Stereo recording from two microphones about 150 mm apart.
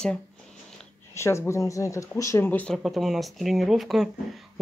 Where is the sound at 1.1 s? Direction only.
20° left (ahead or behind).